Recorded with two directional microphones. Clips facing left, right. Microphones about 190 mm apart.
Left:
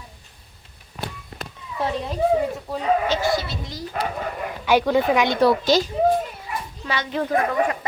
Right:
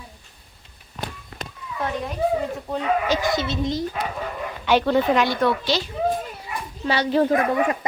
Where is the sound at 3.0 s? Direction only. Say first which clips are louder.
Even; 15° right (ahead or behind).